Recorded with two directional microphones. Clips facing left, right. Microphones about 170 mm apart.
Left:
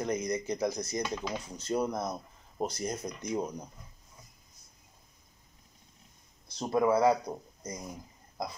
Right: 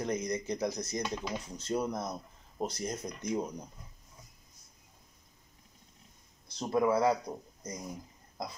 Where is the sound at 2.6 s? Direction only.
5° left (ahead or behind).